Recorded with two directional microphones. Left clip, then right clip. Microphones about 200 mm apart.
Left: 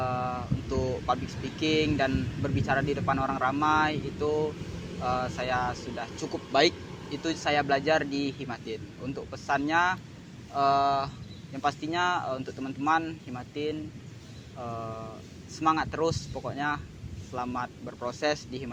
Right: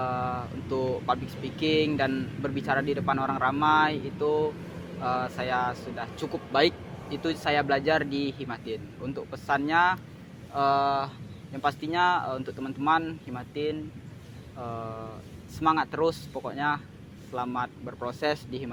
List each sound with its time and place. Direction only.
0.0 s speech: 15° right (ahead or behind)